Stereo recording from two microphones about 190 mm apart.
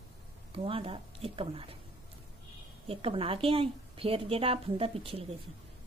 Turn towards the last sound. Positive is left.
turn(degrees=-30)  # may be behind; listen again after turning